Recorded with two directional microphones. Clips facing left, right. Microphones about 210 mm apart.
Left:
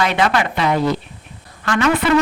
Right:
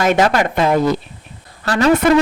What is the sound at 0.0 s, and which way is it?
Speech, 45° right (ahead or behind).